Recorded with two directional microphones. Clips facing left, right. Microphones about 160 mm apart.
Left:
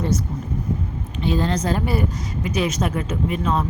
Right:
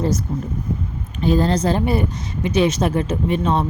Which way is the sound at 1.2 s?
40° right (ahead or behind).